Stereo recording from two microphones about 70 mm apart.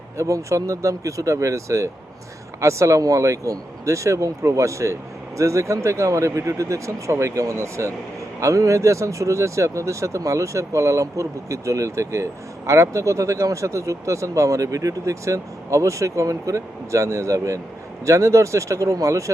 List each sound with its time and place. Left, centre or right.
0.2 s speech: right